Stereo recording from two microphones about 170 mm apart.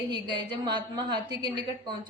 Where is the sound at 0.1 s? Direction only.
25° right (ahead or behind).